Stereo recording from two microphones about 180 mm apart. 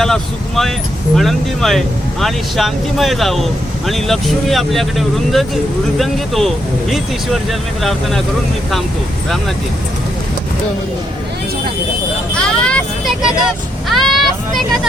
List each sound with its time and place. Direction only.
0.0 s speech: centre (ahead or behind)
12.3 s speech: 5° left (ahead or behind)
13.8 s vehicle: centre (ahead or behind)